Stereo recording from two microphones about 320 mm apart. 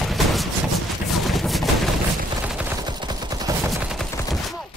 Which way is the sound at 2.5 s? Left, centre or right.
Centre.